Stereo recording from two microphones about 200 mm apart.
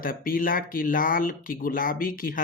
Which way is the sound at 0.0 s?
45° left (ahead or behind).